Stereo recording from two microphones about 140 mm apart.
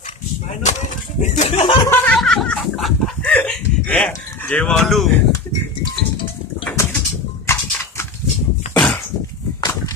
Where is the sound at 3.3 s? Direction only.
10° left (ahead or behind).